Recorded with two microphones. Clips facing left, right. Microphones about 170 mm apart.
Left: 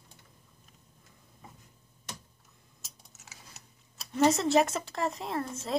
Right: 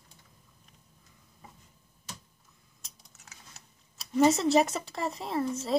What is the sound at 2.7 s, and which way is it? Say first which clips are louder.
Speech: left 1 dB; 5° left (ahead or behind).